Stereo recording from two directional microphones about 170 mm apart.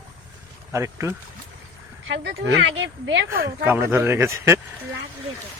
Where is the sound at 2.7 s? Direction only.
90° right.